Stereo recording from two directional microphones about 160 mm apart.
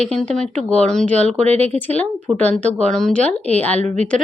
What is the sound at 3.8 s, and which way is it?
Speech, 45° right (ahead or behind).